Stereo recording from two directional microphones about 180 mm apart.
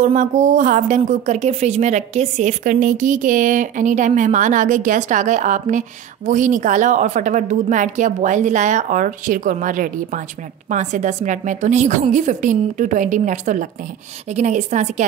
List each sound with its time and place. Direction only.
0.0 s a woman's voice: 45° right (ahead or behind)